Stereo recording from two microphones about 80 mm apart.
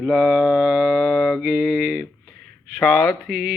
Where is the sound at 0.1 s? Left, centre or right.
Centre.